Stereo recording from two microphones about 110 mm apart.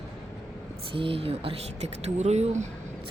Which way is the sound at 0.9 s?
55° right (ahead or behind).